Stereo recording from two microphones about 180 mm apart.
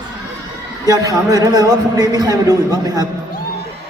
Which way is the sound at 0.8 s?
20° right (ahead or behind).